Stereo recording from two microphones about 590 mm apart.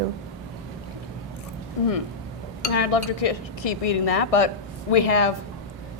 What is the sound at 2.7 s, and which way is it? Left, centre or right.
Speech, left.